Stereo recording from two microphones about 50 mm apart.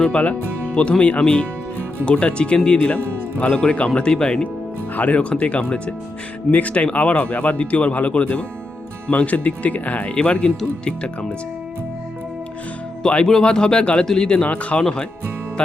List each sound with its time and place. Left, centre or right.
0.1 s speech: left
4.9 s speech: left
13.1 s speech: centre
14.3 s speech: left